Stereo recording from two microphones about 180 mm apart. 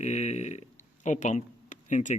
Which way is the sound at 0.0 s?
40° left (ahead or behind).